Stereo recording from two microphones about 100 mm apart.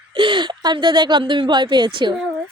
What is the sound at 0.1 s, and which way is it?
Speech, 55° right (ahead or behind).